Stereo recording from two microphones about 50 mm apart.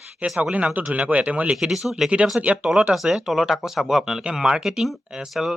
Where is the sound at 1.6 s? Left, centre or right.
Centre.